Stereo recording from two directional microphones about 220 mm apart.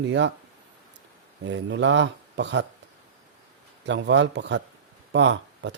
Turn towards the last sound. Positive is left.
turn(degrees=-55)  # may be behind; listen again after turning